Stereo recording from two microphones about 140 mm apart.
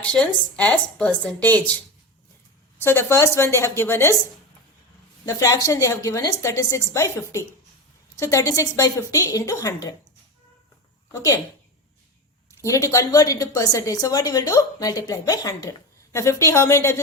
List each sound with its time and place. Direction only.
0.5 s a woman's voice: 10° left (ahead or behind)
2.8 s a woman's voice: 20° left (ahead or behind)
5.2 s a woman's voice: 25° left (ahead or behind)
11.1 s a woman's voice: 20° left (ahead or behind)
12.5 s a woman's voice: 20° left (ahead or behind)